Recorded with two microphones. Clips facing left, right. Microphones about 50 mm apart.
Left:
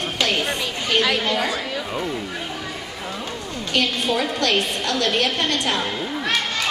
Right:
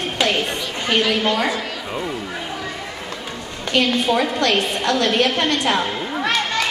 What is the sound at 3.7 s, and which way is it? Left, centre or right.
A woman's voice, right.